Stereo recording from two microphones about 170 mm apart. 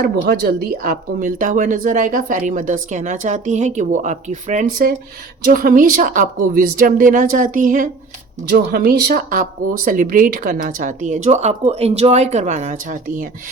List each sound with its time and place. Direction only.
0.0 s a woman's voice: 60° right (ahead or behind)
5.4 s a woman's voice: 55° right (ahead or behind)
8.4 s a woman's voice: 60° right (ahead or behind)